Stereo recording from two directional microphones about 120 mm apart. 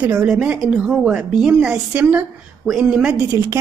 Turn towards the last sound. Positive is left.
turn(degrees=-20)  # may be behind; listen again after turning